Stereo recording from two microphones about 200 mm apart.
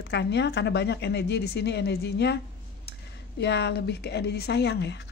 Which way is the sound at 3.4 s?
60° left (ahead or behind).